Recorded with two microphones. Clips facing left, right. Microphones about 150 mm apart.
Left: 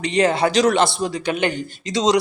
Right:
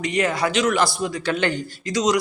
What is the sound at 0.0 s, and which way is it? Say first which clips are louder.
Speech: left 4 dB; 30° left (ahead or behind).